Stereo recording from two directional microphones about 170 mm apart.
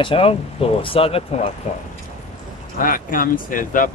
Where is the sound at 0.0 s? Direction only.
35° left (ahead or behind).